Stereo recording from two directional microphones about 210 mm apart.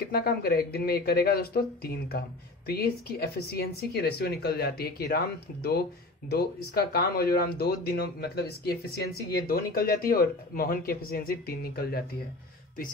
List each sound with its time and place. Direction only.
0.1 s speech: 45° left (ahead or behind)